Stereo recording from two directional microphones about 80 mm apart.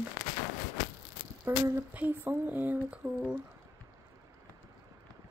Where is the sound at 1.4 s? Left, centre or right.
Right.